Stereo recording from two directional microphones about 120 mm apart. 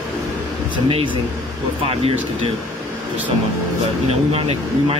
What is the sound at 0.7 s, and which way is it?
Speech, 45° right (ahead or behind).